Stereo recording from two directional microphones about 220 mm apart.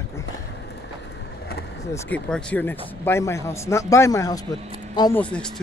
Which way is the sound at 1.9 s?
5° left (ahead or behind).